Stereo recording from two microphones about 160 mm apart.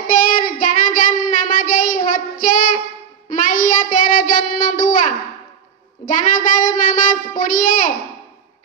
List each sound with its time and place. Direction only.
0.0 s child singing: 55° left (ahead or behind)
6.0 s a child's voice: 55° left (ahead or behind)